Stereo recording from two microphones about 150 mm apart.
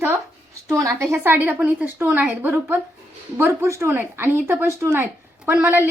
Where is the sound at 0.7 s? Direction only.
20° right (ahead or behind).